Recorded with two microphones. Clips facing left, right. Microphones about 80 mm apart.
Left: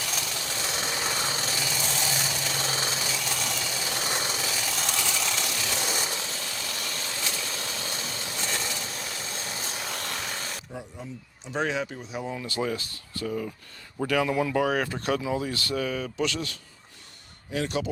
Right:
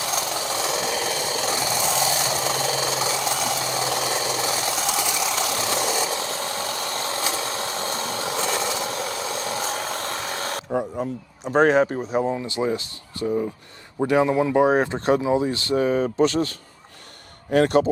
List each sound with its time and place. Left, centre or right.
0.0 s a sound: right
1.4 s vehicle: right
2.2 s a sound: right
5.3 s vehicle: right
12.3 s speech: right
17.5 s speech: right